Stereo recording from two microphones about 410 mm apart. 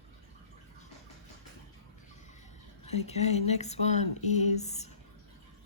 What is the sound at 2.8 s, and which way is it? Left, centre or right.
Speech, centre.